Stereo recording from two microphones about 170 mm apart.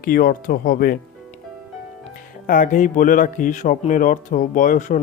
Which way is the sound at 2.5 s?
50° left (ahead or behind).